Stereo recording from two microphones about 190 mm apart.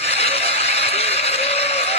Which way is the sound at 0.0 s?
35° left (ahead or behind).